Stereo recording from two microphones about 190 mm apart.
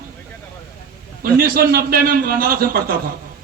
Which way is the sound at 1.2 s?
50° right (ahead or behind).